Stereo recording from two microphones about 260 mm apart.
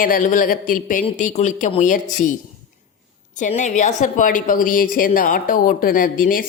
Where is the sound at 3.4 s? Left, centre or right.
Left.